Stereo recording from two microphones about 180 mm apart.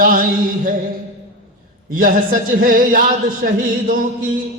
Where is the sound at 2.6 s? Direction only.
50° right (ahead or behind).